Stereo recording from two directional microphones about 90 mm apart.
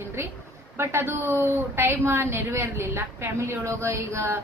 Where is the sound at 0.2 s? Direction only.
30° right (ahead or behind).